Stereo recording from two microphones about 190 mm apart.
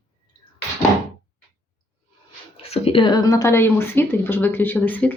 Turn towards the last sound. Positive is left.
turn(degrees=10)  # may be behind; listen again after turning